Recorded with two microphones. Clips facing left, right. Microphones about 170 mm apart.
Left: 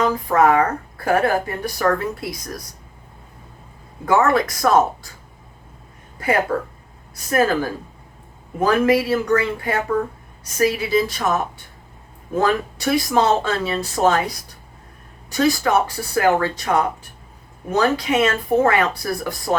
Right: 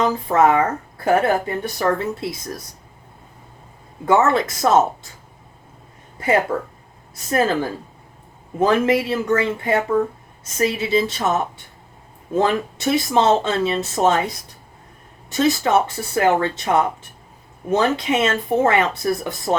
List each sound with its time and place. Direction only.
0.0 s speech: 25° right (ahead or behind)
4.0 s speech: 25° right (ahead or behind)
7.3 s speech: 25° right (ahead or behind)
15.3 s speech: 25° right (ahead or behind)